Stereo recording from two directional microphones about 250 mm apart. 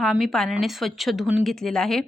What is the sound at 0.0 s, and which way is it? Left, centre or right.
Speech, centre.